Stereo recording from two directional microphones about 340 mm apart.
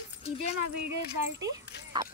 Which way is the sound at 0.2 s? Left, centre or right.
Centre.